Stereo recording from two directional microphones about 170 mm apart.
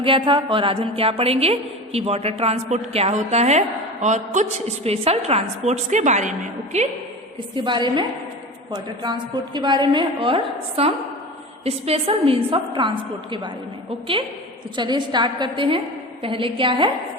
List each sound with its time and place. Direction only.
0.0 s a woman's voice: 30° right (ahead or behind)
7.5 s a woman's voice: 30° right (ahead or behind)
14.8 s a woman's voice: 25° right (ahead or behind)